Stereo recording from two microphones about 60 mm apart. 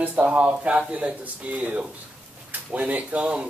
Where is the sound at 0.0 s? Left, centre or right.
Right.